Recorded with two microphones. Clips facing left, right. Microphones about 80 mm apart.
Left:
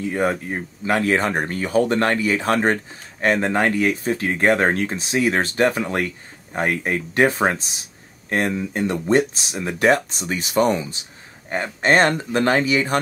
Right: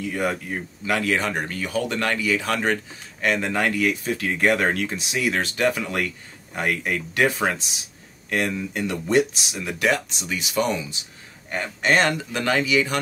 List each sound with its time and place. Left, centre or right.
0.0 s speech: left
11.4 s speech: left